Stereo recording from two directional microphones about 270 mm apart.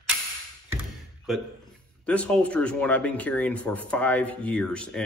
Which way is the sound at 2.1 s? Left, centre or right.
Centre.